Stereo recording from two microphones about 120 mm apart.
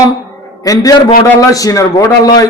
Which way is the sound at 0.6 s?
30° left (ahead or behind).